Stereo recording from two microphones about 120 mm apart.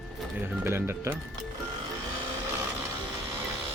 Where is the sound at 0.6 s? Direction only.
20° right (ahead or behind).